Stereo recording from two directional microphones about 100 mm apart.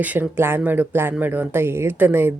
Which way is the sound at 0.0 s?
20° right (ahead or behind).